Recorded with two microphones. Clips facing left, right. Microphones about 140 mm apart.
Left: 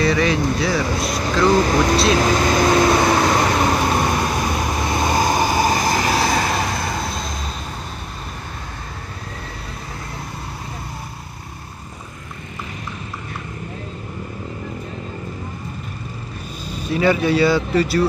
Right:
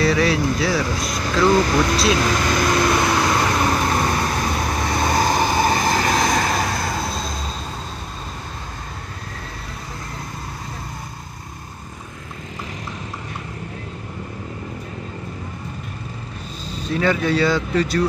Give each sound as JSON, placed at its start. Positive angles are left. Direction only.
{"t": 0.0, "sound": "speech", "side_deg": 0}
{"t": 1.5, "sound": "speech", "side_deg": 30}
{"t": 2.6, "sound": "a sound", "side_deg": 30}
{"t": 3.4, "sound": "vehicle", "side_deg": 20}
{"t": 16.7, "sound": "speech", "side_deg": 10}